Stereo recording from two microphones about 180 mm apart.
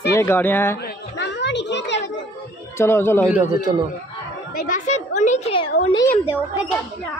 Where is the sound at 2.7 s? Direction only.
15° left (ahead or behind).